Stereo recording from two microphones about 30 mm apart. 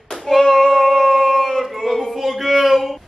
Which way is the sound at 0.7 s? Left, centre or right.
Centre.